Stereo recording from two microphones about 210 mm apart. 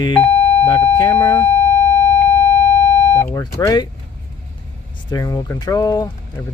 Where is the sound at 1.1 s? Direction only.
10° left (ahead or behind).